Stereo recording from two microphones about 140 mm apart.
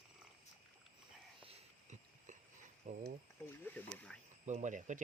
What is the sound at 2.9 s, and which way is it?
Speech, 55° right (ahead or behind).